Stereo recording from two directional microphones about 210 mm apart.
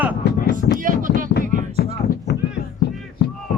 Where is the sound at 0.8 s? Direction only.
40° right (ahead or behind).